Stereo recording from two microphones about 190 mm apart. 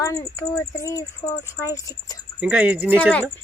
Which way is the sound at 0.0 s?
15° left (ahead or behind).